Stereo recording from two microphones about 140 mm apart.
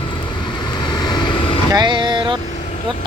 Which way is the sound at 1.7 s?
35° right (ahead or behind).